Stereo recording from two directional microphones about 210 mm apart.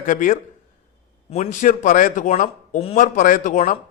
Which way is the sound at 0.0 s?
40° left (ahead or behind).